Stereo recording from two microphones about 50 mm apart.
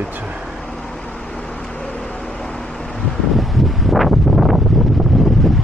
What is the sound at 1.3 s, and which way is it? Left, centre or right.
Vehicle, left.